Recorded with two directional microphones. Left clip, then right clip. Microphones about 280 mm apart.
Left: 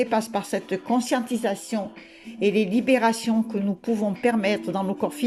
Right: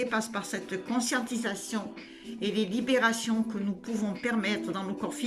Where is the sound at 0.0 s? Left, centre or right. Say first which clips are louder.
Left 7 dB; centre.